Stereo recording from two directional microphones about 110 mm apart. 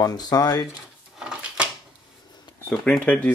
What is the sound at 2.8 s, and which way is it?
Speech, 10° left (ahead or behind).